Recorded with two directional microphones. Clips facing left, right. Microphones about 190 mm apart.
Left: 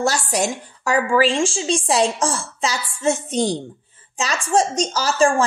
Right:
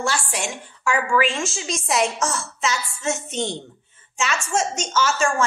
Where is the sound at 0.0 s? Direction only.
40° left (ahead or behind).